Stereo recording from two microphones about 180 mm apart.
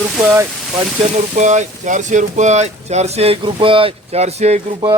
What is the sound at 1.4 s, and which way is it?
Speech, 40° right (ahead or behind).